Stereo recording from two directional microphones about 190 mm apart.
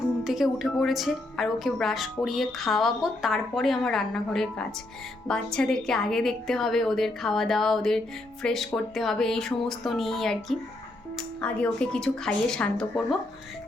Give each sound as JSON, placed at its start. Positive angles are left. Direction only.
{"t": 0.3, "sound": "a woman's voice", "side_deg": 0}